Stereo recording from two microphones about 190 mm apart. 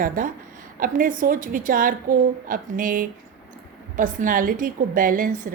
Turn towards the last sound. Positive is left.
turn(degrees=-45)  # may be behind; listen again after turning